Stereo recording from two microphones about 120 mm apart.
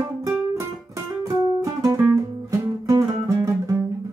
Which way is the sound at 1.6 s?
25° right (ahead or behind).